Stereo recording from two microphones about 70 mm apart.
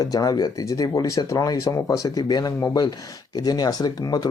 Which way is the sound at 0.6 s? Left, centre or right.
Left.